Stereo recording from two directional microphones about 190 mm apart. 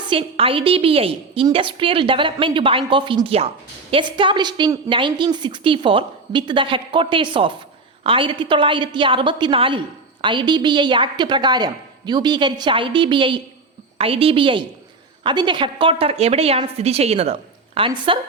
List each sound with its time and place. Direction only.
0.1 s a woman's voice: 30° right (ahead or behind)